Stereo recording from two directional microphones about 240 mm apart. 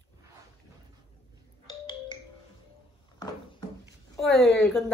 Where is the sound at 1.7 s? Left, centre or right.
Centre.